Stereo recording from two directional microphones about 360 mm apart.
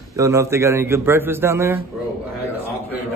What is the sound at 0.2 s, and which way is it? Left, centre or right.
A man's voice, centre.